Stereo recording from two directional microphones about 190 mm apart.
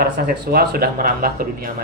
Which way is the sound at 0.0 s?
55° right (ahead or behind).